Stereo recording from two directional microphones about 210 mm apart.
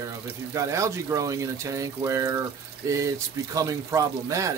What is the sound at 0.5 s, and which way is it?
Speech, 15° right (ahead or behind).